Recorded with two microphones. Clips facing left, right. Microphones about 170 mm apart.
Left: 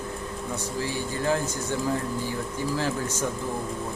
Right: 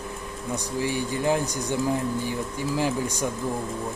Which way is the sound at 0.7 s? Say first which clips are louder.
Right 4 dB; 15° right (ahead or behind).